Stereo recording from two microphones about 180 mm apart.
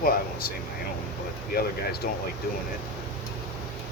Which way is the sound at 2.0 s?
55° left (ahead or behind).